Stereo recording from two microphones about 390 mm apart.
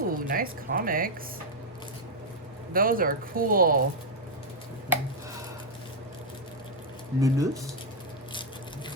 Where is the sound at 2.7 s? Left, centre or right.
Right.